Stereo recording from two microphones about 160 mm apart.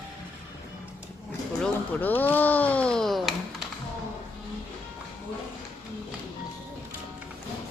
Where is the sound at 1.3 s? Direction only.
10° left (ahead or behind).